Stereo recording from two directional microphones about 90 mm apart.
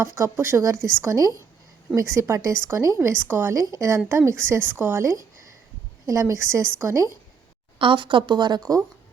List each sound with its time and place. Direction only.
0.0 s a woman's voice: 35° right (ahead or behind)
7.8 s speech: 70° right (ahead or behind); by 8.8 s 45° right (ahead or behind)